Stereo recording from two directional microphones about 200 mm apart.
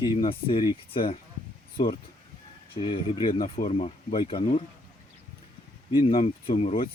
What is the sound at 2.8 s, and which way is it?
Speech, 25° left (ahead or behind).